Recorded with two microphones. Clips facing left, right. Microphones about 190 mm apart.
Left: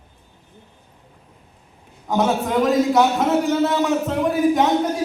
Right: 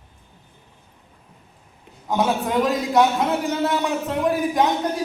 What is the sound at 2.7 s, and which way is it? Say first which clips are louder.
A man's voice: left 3 dB; centre (ahead or behind).